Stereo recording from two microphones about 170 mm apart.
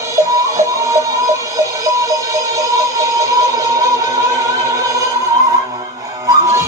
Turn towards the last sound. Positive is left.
turn(degrees=-15)  # may be behind; listen again after turning